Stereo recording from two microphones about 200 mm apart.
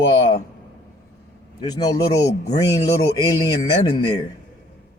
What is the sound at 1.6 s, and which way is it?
A man's voice, 20° left (ahead or behind).